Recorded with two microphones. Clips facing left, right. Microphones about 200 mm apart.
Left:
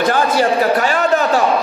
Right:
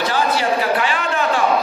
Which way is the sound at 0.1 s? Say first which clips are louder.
Left 4 dB; 45° left (ahead or behind).